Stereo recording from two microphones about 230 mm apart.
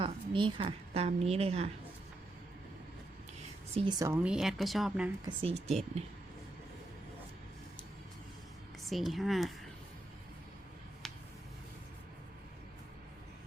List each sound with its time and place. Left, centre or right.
0.0 s a woman's voice: right
3.8 s speech: centre
5.2 s speech: right
8.8 s speech: centre
11.0 s a sound: centre